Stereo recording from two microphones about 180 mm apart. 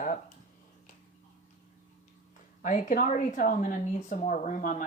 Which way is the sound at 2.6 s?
45° left (ahead or behind).